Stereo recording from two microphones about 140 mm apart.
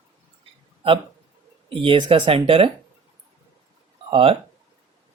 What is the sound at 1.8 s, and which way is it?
Speech, 35° right (ahead or behind).